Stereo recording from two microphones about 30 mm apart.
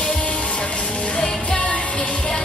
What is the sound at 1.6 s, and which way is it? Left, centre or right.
Music, left.